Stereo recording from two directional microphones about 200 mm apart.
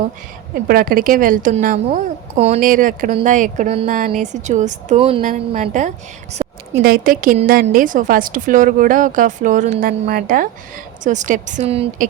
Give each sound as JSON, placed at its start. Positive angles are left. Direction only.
{"t": 0.5, "sound": "speech", "side_deg": -45}
{"t": 5.2, "sound": "speech", "side_deg": -40}
{"t": 6.7, "sound": "speech", "side_deg": -50}